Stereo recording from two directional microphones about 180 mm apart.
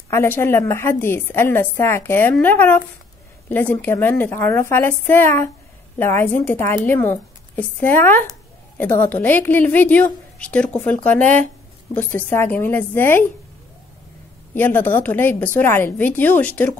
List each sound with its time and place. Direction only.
0.1 s a woman's voice: 15° left (ahead or behind)
14.5 s a woman's voice: 10° left (ahead or behind)